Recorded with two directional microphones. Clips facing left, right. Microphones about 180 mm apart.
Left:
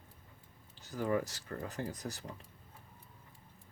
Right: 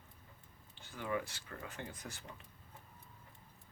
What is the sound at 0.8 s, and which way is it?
Speech, 40° left (ahead or behind).